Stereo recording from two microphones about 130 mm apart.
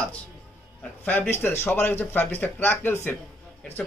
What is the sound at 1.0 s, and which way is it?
A man's voice, 15° left (ahead or behind).